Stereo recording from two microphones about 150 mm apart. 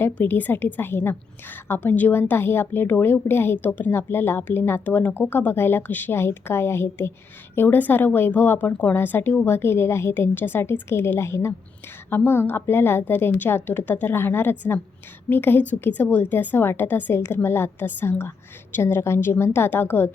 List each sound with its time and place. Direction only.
0.0 s a woman's voice: 10° left (ahead or behind)